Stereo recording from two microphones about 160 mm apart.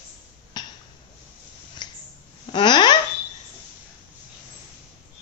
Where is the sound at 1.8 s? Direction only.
25° left (ahead or behind).